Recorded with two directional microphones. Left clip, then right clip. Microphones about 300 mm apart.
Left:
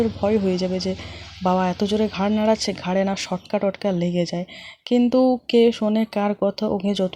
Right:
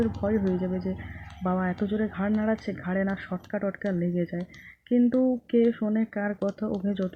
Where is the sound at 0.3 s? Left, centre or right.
Centre.